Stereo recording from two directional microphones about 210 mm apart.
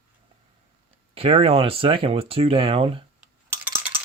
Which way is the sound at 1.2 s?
25° right (ahead or behind).